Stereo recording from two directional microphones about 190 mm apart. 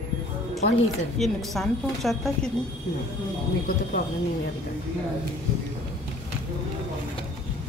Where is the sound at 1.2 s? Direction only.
Centre (ahead or behind).